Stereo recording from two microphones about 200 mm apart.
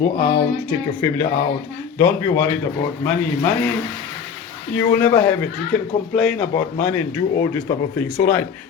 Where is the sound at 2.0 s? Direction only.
15° left (ahead or behind).